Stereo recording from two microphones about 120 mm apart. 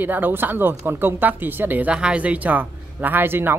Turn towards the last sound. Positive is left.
turn(degrees=-15)  # may be behind; listen again after turning